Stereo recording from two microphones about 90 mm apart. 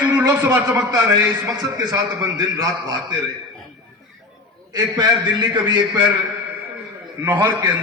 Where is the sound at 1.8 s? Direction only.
45° right (ahead or behind).